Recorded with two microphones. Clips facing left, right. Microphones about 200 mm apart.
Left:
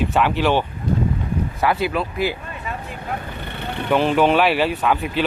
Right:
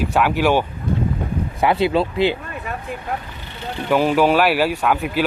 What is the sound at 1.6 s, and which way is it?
Speech, 25° right (ahead or behind).